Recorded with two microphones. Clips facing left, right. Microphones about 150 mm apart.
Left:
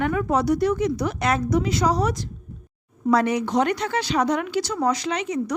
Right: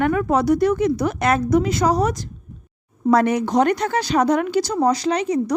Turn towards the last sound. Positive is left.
turn(degrees=-35)  # may be behind; listen again after turning